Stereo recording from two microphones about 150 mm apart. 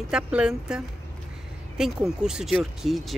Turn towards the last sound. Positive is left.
turn(degrees=0)  # may be behind; listen again after turning